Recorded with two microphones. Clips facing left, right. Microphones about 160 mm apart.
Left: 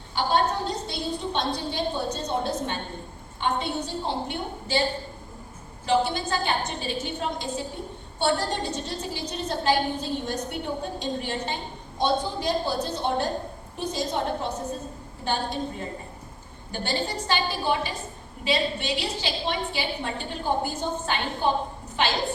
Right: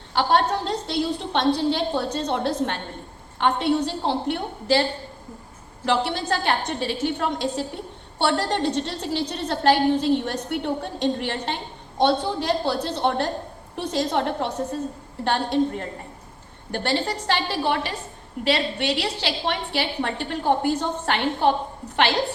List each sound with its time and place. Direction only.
0.1 s a woman's voice: 80° right